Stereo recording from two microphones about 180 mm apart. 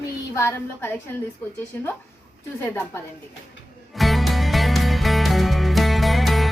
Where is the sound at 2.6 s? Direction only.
15° left (ahead or behind).